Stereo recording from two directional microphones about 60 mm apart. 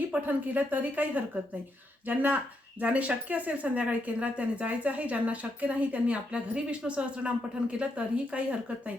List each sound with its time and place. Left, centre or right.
0.1 s speech: right